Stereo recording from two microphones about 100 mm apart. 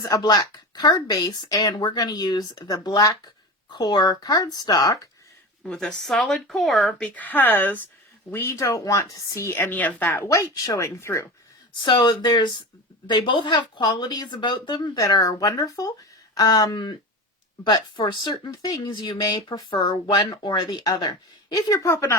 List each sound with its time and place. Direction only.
0.0 s speech: 40° left (ahead or behind)
5.6 s speech: 10° left (ahead or behind)
7.1 s a woman's voice: 15° left (ahead or behind)
11.8 s speech: 50° left (ahead or behind)
19.2 s speech: 40° left (ahead or behind)
21.8 s a woman's voice: 30° left (ahead or behind)